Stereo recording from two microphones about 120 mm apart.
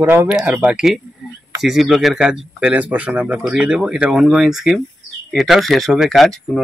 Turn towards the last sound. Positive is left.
turn(degrees=0)  # may be behind; listen again after turning